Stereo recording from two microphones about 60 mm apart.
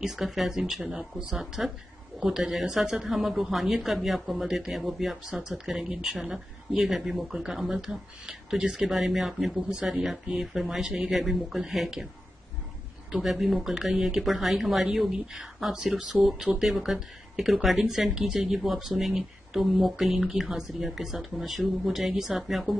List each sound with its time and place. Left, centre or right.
0.0 s speech: centre
9.7 s speech: centre
9.9 s speech: centre
13.1 s speech: centre
16.0 s speech: centre
16.3 s speech: centre